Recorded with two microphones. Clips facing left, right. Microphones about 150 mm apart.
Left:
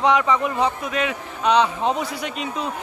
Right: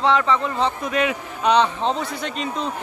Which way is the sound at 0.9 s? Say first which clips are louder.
Right 2 dB; centre (ahead or behind).